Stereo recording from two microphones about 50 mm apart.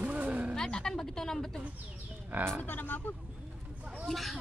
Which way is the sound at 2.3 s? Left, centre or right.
Right.